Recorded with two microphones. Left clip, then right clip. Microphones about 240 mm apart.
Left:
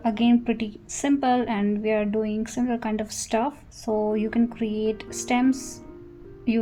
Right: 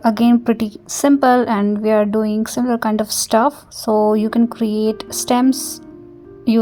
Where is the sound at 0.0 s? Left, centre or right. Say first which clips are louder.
Right 8 dB; right.